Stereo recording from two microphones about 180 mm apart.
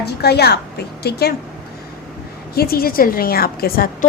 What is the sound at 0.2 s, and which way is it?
A woman's voice, 65° left (ahead or behind).